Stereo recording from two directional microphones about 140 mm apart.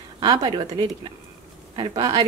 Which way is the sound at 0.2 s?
30° right (ahead or behind).